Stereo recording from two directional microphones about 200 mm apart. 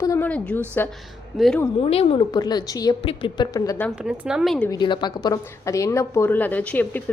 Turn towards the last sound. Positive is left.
turn(degrees=10)  # may be behind; listen again after turning